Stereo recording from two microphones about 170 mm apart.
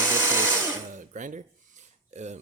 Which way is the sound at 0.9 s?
50° right (ahead or behind).